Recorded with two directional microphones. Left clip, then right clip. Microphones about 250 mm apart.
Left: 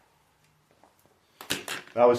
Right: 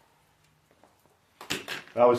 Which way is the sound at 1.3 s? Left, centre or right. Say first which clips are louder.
Left 1 dB; left.